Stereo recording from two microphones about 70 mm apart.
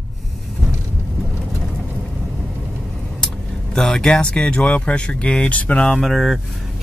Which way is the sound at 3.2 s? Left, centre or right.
Centre.